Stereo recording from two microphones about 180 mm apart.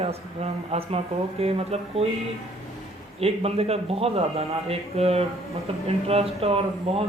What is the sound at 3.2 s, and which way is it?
Speech, 35° right (ahead or behind).